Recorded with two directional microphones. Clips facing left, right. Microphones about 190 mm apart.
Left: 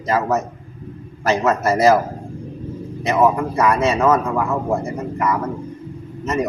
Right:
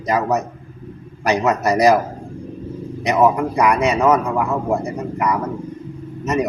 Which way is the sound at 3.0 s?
15° right (ahead or behind).